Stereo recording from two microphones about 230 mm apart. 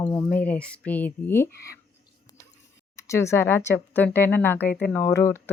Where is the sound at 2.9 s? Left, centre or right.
Centre.